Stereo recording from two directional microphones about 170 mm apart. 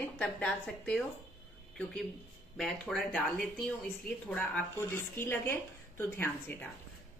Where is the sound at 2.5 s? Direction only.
5° left (ahead or behind).